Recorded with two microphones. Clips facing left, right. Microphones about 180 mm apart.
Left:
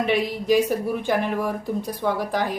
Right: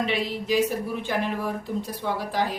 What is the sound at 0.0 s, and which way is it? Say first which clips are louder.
Speech: left 4 dB; 50° left (ahead or behind).